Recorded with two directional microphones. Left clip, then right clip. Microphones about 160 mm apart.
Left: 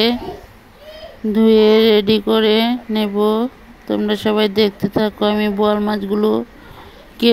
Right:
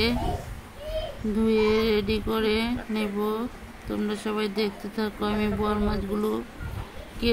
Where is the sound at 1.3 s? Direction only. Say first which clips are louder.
Left 12 dB; 45° left (ahead or behind).